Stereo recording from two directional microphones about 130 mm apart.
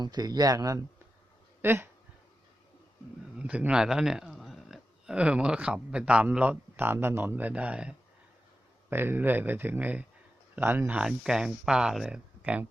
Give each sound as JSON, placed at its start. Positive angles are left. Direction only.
{"t": 0.0, "sound": "speech", "side_deg": -30}
{"t": 3.3, "sound": "speech", "side_deg": -10}